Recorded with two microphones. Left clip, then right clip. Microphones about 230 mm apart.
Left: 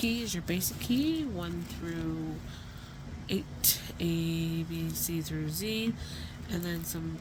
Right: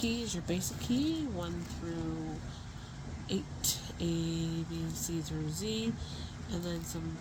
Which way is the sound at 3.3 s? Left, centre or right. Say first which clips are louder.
Left 4 dB; left.